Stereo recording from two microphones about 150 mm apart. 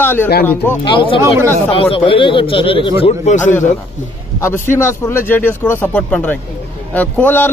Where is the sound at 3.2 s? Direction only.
55° left (ahead or behind).